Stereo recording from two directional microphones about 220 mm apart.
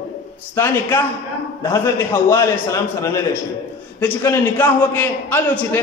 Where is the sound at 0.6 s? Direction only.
10° left (ahead or behind).